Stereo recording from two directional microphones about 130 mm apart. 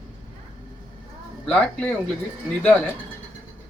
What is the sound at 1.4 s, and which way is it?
Speech, 10° left (ahead or behind).